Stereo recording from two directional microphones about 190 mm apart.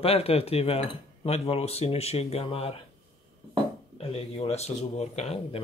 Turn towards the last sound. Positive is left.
turn(degrees=35)  # may be behind; listen again after turning